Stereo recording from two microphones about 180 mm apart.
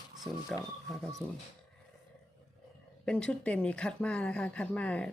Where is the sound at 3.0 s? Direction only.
5° left (ahead or behind).